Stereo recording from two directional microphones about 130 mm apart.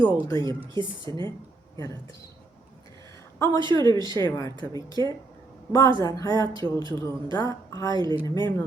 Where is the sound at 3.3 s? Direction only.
25° left (ahead or behind).